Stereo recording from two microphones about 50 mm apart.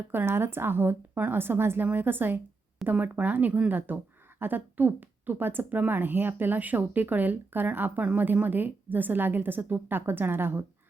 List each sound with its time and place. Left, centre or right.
0.3 s a woman's voice: right
2.8 s speech: right